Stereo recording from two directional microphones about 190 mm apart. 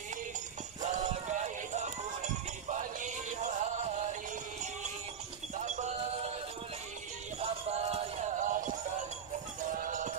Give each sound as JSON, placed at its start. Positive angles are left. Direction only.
{"t": 0.8, "sound": "music", "side_deg": -35}
{"t": 5.6, "sound": "music", "side_deg": -40}
{"t": 7.3, "sound": "music", "side_deg": -35}